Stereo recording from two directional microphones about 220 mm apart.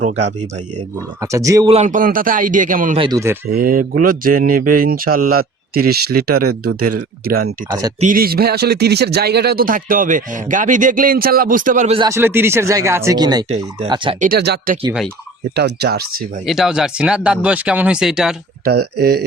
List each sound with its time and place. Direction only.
1.2 s speech: 15° right (ahead or behind)
1.7 s speech: 35° right (ahead or behind)
3.0 s speech: 15° right (ahead or behind)
3.5 s speech: 40° right (ahead or behind)
7.7 s speech: 15° right (ahead or behind)
8.0 s speech: 40° right (ahead or behind)
12.0 s speech: 10° right (ahead or behind)
14.2 s speech: 45° right (ahead or behind)
16.5 s speech: centre (ahead or behind)
18.6 s speech: 45° right (ahead or behind)